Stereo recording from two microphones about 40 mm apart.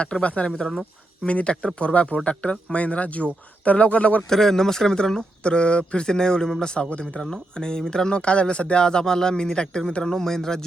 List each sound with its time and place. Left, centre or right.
0.0 s speech: left
4.3 s a man's voice: centre
5.4 s speech: left
6.9 s speech: left
7.2 s a man's voice: centre